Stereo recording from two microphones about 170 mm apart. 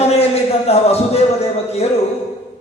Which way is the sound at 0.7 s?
35° left (ahead or behind).